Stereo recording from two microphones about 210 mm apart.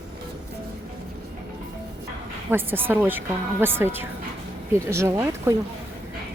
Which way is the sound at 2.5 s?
10° right (ahead or behind).